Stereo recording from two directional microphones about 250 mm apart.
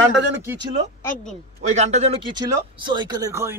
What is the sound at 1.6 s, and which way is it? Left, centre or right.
Speech, right.